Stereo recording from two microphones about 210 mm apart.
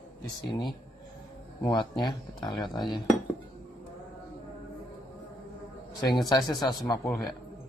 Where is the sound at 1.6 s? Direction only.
20° left (ahead or behind).